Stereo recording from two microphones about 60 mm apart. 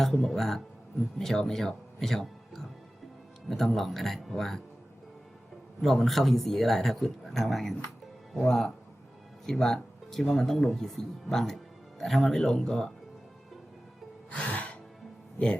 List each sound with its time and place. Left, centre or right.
0.0 s speech: centre
5.8 s speech: centre
14.3 s music: left